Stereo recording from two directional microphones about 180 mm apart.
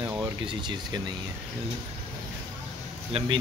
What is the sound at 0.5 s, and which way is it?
Speech, 25° right (ahead or behind).